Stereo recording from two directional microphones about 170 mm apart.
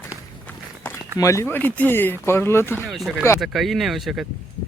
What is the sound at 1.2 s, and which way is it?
Speech, 15° left (ahead or behind).